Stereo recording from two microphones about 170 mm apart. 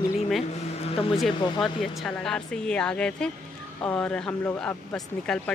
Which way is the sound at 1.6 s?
Centre (ahead or behind).